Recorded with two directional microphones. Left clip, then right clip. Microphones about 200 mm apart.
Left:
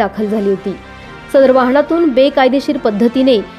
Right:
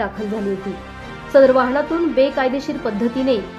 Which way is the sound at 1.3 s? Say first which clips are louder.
Left 4 dB; 35° left (ahead or behind).